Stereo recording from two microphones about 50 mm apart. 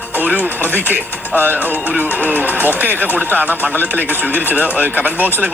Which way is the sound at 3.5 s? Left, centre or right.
Left.